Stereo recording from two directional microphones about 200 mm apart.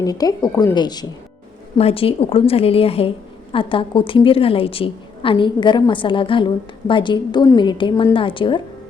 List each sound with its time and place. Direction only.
0.0 s a woman's voice: 20° left (ahead or behind)